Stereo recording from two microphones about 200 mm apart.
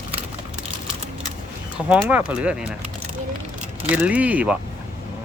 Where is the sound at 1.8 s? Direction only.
5° right (ahead or behind).